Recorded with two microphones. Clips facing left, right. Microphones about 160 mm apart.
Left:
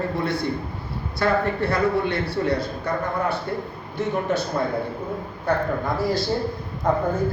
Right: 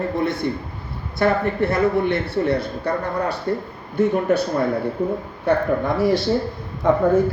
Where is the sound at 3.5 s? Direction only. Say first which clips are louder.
Right 5 dB; 40° right (ahead or behind).